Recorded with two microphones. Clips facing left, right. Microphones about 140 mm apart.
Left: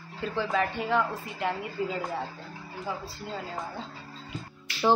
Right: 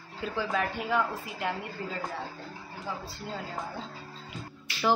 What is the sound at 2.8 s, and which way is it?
Speech, centre (ahead or behind).